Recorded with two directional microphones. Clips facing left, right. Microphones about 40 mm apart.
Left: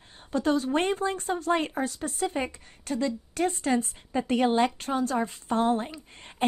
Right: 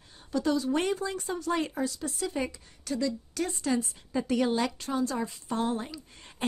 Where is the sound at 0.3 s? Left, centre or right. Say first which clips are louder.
Left 2 dB; left.